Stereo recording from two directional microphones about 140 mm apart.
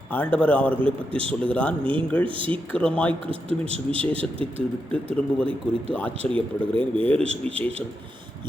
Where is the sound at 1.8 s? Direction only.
35° right (ahead or behind).